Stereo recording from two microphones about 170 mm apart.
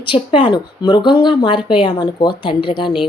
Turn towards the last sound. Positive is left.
turn(degrees=30)  # may be behind; listen again after turning